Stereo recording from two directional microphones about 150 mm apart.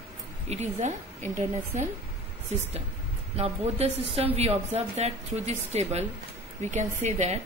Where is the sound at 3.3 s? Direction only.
45° right (ahead or behind).